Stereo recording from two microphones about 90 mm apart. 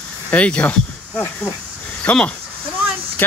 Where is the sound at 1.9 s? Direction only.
15° left (ahead or behind).